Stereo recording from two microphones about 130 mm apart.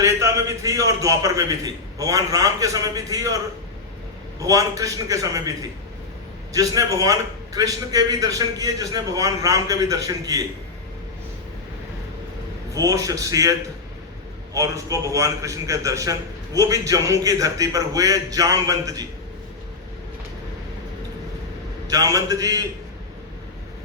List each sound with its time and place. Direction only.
0.0 s a man's voice: 20° right (ahead or behind)
4.4 s a man's voice: 25° right (ahead or behind)
12.7 s a man's voice: 25° right (ahead or behind)
21.8 s a man's voice: 25° right (ahead or behind)